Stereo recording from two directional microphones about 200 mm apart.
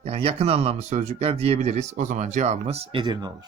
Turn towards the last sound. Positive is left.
turn(degrees=-20)  # may be behind; listen again after turning